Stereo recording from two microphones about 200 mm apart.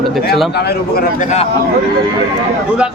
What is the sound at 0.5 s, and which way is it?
Speech, 55° left (ahead or behind).